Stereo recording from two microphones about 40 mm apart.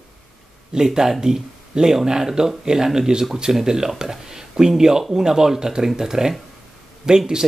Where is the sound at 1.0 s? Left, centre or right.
Centre.